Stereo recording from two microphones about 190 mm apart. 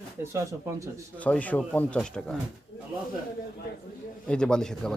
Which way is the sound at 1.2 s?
10° left (ahead or behind).